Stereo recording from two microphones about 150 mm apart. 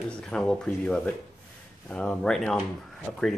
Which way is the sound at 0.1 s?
5° left (ahead or behind).